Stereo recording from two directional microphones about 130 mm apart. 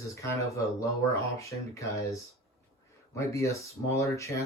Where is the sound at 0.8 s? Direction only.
25° left (ahead or behind).